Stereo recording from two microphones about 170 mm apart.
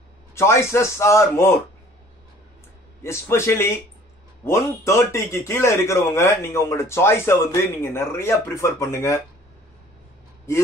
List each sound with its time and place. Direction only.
0.3 s speech: 15° left (ahead or behind)
3.0 s speech: 15° left (ahead or behind)